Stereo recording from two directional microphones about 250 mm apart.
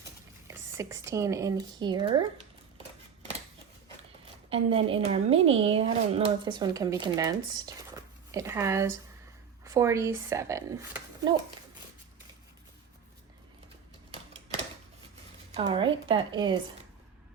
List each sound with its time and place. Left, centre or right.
0.4 s speech: centre
4.4 s a woman's voice: right
15.5 s speech: right